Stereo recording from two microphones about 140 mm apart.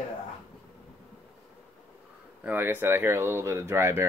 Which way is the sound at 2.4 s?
15° right (ahead or behind).